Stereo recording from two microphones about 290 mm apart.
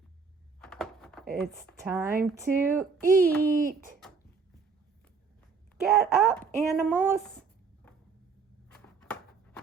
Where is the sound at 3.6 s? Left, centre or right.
Right.